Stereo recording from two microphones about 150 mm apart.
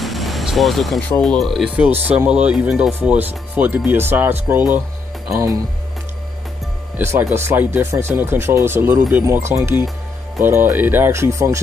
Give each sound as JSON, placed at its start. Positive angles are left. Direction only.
{"t": 0.0, "sound": "music", "side_deg": 0}
{"t": 1.2, "sound": "speech", "side_deg": 0}
{"t": 7.0, "sound": "speech", "side_deg": -15}